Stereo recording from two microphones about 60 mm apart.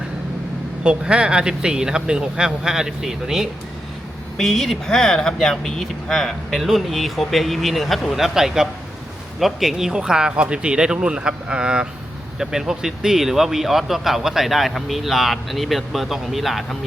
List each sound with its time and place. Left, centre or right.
0.9 s speech: centre
4.4 s speech: centre